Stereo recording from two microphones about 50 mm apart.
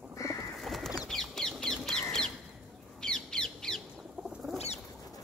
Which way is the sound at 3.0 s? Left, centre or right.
Centre.